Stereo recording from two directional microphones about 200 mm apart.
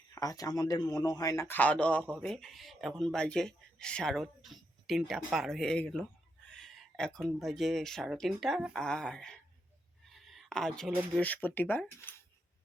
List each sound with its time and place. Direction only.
0.1 s speech: 15° left (ahead or behind)
10.1 s a sound: centre (ahead or behind)
11.1 s speech: 5° left (ahead or behind)